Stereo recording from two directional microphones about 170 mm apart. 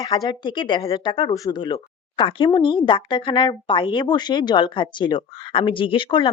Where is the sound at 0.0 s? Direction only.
20° left (ahead or behind).